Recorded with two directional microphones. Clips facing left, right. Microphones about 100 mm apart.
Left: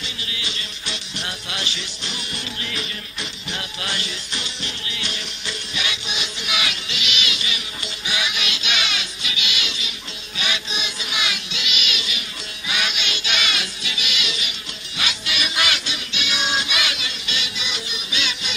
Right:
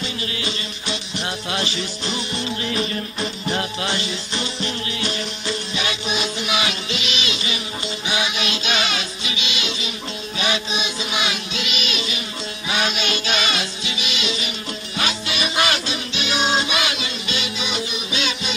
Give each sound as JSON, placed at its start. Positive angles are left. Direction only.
{"t": 0.0, "sound": "music", "side_deg": -40}
{"t": 10.4, "sound": "child singing", "side_deg": -30}
{"t": 12.6, "sound": "music", "side_deg": -35}